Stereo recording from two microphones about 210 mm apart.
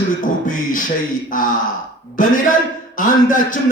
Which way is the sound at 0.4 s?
40° left (ahead or behind).